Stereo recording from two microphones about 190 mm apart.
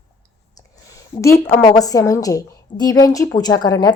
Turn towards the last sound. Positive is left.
turn(degrees=20)  # may be behind; listen again after turning